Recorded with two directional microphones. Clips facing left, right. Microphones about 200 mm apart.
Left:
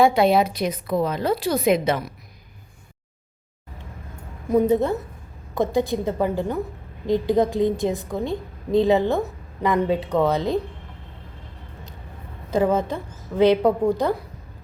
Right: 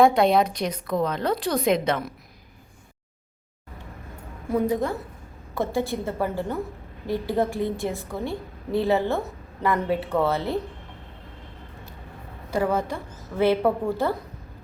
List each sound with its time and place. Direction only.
0.0 s a woman's voice: centre (ahead or behind)
4.4 s a woman's voice: 20° left (ahead or behind)
12.5 s a woman's voice: 20° left (ahead or behind)